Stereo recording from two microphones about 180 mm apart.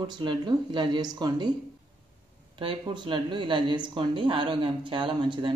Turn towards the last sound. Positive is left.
turn(degrees=-25)  # may be behind; listen again after turning